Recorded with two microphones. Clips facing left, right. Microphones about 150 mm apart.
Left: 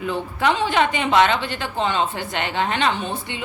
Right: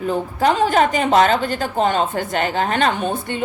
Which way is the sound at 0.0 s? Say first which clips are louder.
Right 4 dB; 40° right (ahead or behind).